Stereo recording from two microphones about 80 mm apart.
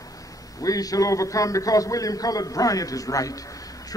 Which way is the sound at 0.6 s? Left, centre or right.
Left.